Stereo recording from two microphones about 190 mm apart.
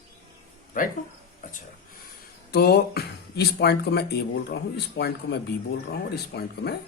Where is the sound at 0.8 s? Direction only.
45° left (ahead or behind).